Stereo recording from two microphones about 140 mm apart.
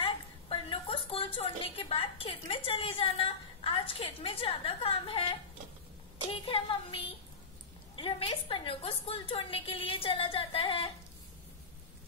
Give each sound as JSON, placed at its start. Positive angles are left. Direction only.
{"t": 0.0, "sound": "a woman's voice", "side_deg": 40}
{"t": 6.4, "sound": "a woman's voice", "side_deg": 40}